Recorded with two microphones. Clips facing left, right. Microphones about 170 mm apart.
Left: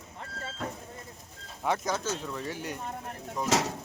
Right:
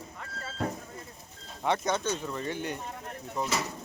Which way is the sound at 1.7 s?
Centre (ahead or behind).